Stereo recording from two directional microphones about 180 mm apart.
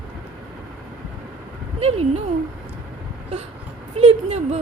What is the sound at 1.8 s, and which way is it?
Speech, 35° right (ahead or behind).